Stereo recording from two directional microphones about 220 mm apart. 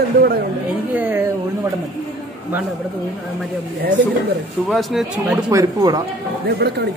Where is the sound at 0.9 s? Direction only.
10° right (ahead or behind).